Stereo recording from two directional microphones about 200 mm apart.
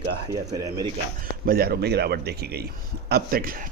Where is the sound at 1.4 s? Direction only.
50° right (ahead or behind).